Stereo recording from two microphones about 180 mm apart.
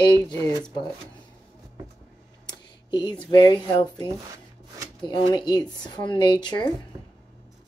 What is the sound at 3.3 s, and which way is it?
A woman's voice, 25° left (ahead or behind).